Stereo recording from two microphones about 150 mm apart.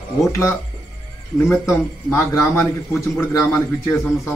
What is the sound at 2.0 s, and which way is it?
A man's voice, 20° left (ahead or behind).